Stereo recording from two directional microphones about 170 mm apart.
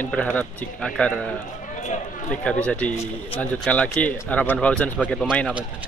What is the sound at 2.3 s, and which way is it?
Speech, 5° left (ahead or behind).